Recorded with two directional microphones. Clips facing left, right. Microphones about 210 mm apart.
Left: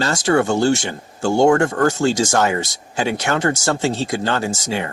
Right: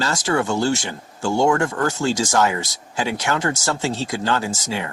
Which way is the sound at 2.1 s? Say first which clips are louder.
Left 2 dB; 25° left (ahead or behind).